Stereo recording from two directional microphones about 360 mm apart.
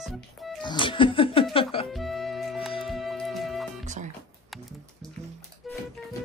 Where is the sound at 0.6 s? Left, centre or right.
Centre.